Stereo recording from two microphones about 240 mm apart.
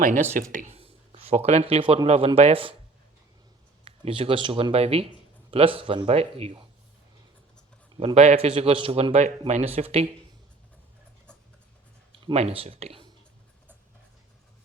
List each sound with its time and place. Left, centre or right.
0.5 s speech: right
3.8 s a man's voice: right
7.9 s a man's voice: right
12.1 s speech: right